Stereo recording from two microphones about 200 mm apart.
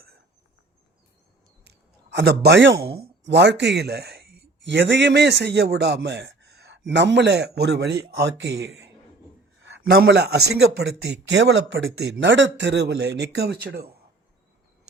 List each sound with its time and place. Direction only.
1.6 s a sound: 55° right (ahead or behind)
2.8 s a man's voice: 55° right (ahead or behind)
9.6 s a man's voice: 60° right (ahead or behind)